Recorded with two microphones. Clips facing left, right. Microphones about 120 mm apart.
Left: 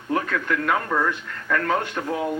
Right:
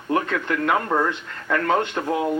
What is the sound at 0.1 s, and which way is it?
A man's voice, 25° right (ahead or behind).